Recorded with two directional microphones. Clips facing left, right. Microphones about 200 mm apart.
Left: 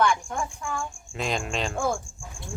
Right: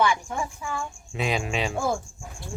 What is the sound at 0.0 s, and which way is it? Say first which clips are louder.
A woman's voice: even; 5° right (ahead or behind).